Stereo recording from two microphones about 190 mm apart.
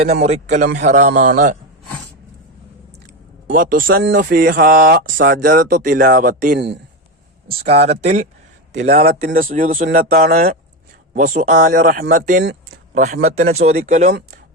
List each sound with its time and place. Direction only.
0.0 s a man's voice: 35° right (ahead or behind)
3.4 s speech: 50° right (ahead or behind)
7.5 s a man's voice: 30° right (ahead or behind); by 10.5 s 55° right (ahead or behind)
11.1 s speech: 45° right (ahead or behind)
12.9 s a man's voice: 35° right (ahead or behind)